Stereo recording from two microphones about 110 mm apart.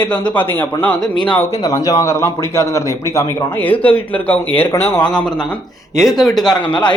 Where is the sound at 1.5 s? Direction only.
35° left (ahead or behind).